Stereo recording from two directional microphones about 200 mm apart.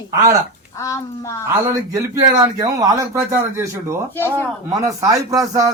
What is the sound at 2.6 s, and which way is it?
Speech, 20° right (ahead or behind).